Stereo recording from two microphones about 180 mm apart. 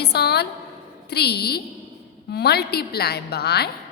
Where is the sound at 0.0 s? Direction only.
65° left (ahead or behind).